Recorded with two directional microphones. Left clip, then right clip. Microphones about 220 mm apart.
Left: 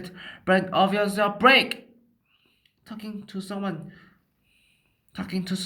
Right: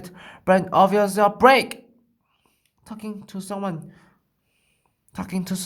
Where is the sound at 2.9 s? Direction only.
45° right (ahead or behind).